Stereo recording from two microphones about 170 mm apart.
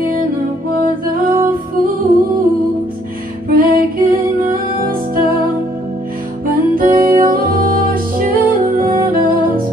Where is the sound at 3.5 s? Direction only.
55° right (ahead or behind).